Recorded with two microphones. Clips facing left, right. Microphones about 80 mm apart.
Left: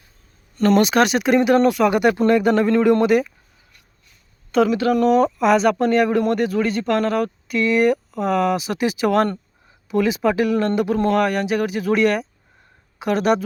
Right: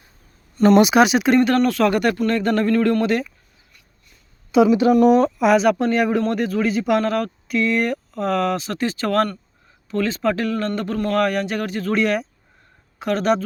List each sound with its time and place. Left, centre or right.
0.5 s speech: centre
1.7 s speech: centre
2.4 s speech: centre
2.6 s speech: centre
3.0 s speech: centre
4.5 s speech: centre
11.1 s speech: centre